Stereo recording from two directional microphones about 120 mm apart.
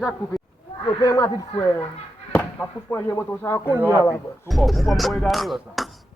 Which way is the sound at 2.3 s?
10° left (ahead or behind).